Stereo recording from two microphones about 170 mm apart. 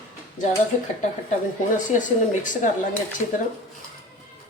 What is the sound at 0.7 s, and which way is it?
Speech, 45° left (ahead or behind).